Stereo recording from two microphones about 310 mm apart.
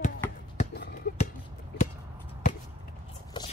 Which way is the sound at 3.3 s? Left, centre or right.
Centre.